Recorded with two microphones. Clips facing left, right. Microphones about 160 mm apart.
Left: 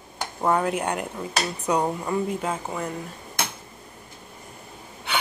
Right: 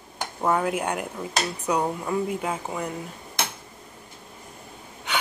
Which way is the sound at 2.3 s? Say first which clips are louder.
Left 1 dB; 10° right (ahead or behind).